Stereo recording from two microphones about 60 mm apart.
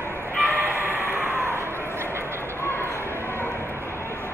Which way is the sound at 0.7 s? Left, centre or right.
Right.